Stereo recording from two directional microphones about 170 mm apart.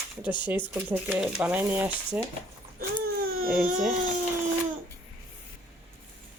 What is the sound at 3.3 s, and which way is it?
Speech, 55° right (ahead or behind).